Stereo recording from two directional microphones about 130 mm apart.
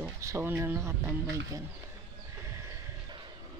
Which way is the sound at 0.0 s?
20° right (ahead or behind).